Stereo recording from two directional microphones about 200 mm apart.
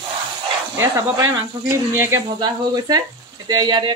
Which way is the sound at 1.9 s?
15° right (ahead or behind).